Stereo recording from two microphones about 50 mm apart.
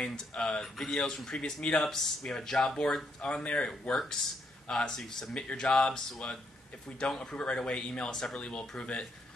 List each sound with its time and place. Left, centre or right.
0.0 s speech: centre
1.8 s speech: centre
3.9 s speech: centre
7.2 s speech: left